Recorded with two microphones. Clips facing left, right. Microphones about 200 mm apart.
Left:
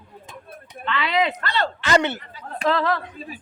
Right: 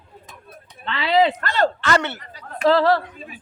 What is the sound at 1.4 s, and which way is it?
Speech, 45° right (ahead or behind).